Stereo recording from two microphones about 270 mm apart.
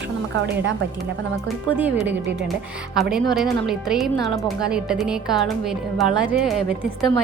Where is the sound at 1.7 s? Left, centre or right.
Centre.